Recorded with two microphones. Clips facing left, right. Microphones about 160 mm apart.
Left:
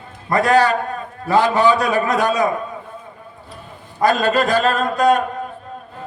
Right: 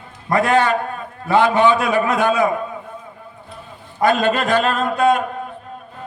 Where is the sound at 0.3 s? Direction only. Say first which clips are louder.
Left 1 dB; 40° left (ahead or behind).